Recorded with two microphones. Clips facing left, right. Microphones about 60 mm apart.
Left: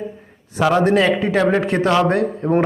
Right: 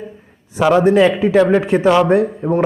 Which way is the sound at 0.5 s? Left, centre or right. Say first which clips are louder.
Right 3 dB; centre.